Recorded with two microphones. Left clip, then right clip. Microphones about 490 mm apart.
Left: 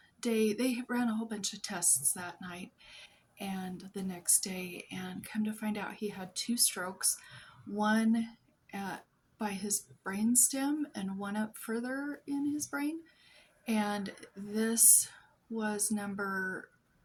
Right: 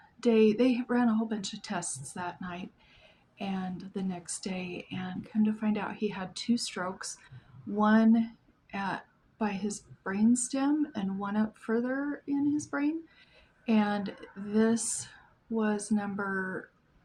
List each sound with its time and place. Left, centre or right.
0.2 s speech: left